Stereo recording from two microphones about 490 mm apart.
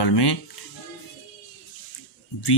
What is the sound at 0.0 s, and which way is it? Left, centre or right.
Speech, left.